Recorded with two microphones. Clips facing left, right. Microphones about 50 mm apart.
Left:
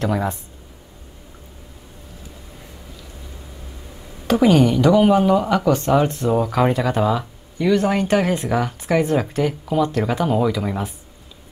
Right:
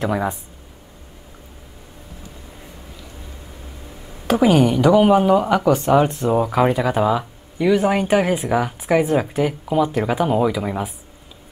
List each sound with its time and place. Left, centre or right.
0.0 s speech: centre
4.3 s speech: centre